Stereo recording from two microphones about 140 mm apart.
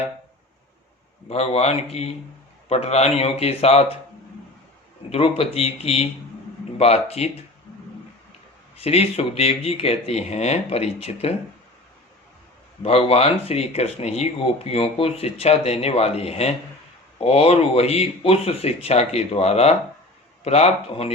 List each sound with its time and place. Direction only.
1.3 s speech: 50° left (ahead or behind)
5.1 s speech: 45° left (ahead or behind)
8.8 s speech: 45° left (ahead or behind)
12.8 s speech: 45° left (ahead or behind)